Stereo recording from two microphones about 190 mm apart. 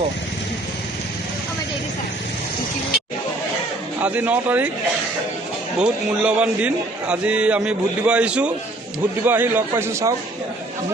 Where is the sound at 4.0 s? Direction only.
5° right (ahead or behind).